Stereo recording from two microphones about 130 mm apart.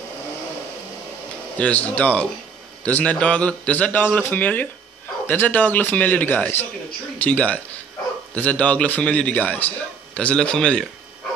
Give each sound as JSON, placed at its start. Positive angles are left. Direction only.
{"t": 1.6, "sound": "a man's voice", "side_deg": 10}